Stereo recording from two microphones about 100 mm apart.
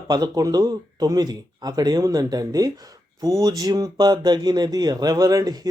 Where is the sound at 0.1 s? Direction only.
40° right (ahead or behind).